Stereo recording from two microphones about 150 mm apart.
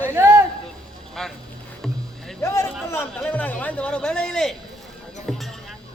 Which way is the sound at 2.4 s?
15° left (ahead or behind).